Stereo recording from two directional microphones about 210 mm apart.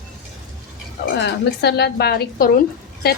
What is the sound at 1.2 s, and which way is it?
Speech, 50° left (ahead or behind).